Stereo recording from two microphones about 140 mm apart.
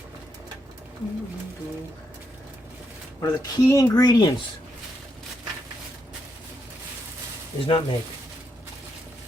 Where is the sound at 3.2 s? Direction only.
25° left (ahead or behind).